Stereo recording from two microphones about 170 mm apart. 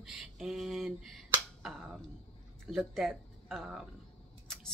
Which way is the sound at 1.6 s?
Centre (ahead or behind).